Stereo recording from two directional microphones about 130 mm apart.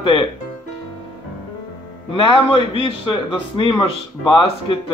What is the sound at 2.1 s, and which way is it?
A man's voice, 40° left (ahead or behind).